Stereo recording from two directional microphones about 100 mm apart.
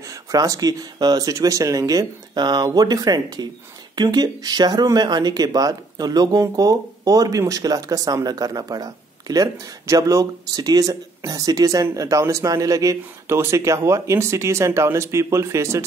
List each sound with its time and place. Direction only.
0.1 s speech: 35° right (ahead or behind)